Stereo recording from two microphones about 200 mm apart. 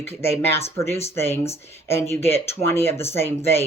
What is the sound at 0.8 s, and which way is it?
Speech, 15° left (ahead or behind).